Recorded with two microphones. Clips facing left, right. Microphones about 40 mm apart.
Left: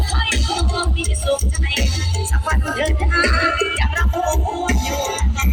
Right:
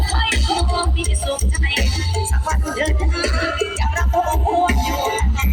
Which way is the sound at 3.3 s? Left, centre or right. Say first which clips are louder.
Left 4 dB; left.